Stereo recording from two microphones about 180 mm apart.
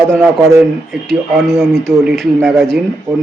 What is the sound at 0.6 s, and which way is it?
A man's voice, centre (ahead or behind).